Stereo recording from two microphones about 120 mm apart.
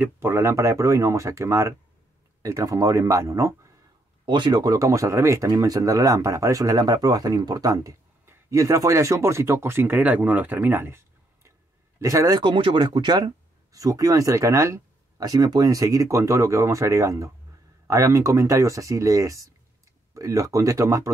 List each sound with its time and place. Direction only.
0.0 s speech: 20° right (ahead or behind)
4.3 s speech: 35° right (ahead or behind)
12.4 s speech: 40° right (ahead or behind)